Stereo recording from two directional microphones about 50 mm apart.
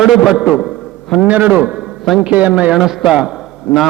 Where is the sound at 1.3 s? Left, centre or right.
Right.